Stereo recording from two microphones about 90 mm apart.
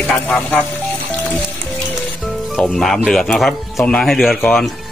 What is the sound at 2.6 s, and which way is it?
Speech, 5° left (ahead or behind).